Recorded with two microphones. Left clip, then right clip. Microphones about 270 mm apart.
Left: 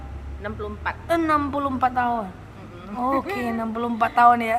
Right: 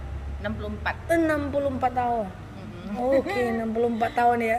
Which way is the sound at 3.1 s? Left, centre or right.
Centre.